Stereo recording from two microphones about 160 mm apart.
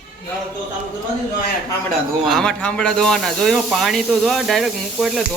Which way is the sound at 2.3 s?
5° left (ahead or behind).